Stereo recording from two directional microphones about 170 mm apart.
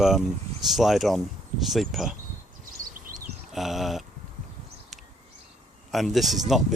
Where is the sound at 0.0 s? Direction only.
Centre (ahead or behind).